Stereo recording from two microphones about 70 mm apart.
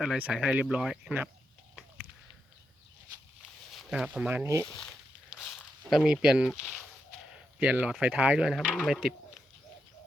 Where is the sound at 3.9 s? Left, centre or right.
Centre.